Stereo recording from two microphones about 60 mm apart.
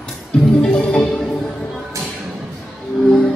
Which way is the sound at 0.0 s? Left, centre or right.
Centre.